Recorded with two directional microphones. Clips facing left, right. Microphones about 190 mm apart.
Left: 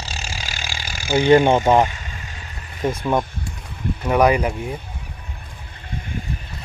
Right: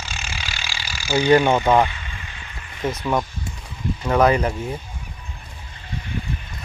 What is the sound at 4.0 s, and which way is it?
Speech, 15° left (ahead or behind).